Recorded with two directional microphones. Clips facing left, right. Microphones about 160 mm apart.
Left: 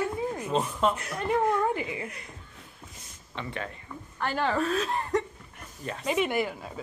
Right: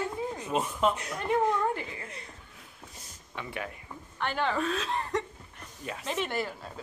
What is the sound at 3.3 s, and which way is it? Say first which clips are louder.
Speech: left 2 dB; 10° right (ahead or behind).